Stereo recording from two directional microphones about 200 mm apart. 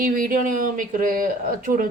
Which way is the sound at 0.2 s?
40° right (ahead or behind).